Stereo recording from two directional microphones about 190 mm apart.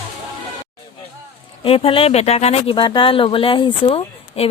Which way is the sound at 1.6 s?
30° left (ahead or behind).